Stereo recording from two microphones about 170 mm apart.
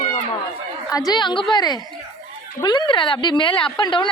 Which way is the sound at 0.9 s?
20° left (ahead or behind).